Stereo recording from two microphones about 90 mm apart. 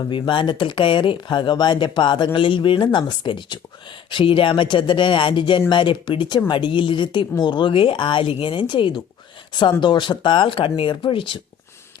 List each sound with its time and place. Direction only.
0.1 s speech: 65° left (ahead or behind)